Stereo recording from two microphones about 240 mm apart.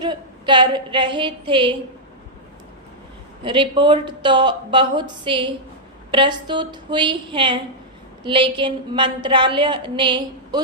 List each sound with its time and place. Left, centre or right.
0.0 s a woman's voice: centre
3.4 s a woman's voice: centre